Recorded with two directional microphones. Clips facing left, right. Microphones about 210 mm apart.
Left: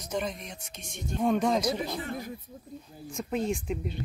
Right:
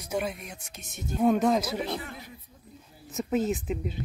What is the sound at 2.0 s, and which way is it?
Speech, 45° left (ahead or behind).